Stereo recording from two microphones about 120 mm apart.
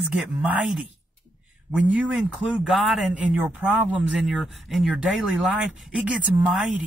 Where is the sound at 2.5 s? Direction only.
Centre (ahead or behind).